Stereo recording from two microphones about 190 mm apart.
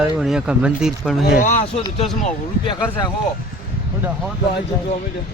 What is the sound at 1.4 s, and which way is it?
Speech, 40° left (ahead or behind).